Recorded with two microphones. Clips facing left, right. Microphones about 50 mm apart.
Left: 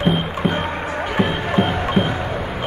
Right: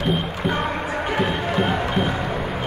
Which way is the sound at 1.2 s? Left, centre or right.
Left.